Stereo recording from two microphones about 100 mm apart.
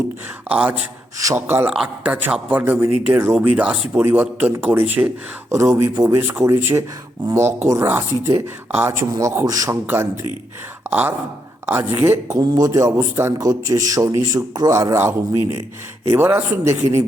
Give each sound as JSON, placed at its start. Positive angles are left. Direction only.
{"t": 0.4, "sound": "a man's voice", "side_deg": -15}
{"t": 1.7, "sound": "a man's voice", "side_deg": -10}
{"t": 9.8, "sound": "a man's voice", "side_deg": -20}
{"t": 10.8, "sound": "a sound", "side_deg": -25}
{"t": 11.6, "sound": "a man's voice", "side_deg": -25}
{"t": 12.4, "sound": "a man's voice", "side_deg": -40}
{"t": 13.4, "sound": "a man's voice", "side_deg": -35}